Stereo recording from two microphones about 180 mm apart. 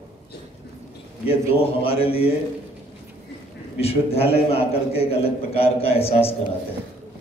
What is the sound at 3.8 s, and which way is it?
A man's voice, 35° left (ahead or behind).